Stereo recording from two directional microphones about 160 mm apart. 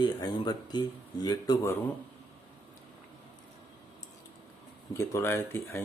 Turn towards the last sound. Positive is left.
turn(degrees=15)  # may be behind; listen again after turning